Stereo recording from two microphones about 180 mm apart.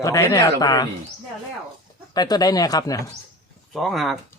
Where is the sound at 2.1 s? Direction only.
20° left (ahead or behind).